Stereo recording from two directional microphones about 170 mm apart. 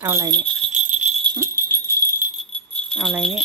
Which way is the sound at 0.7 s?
45° right (ahead or behind).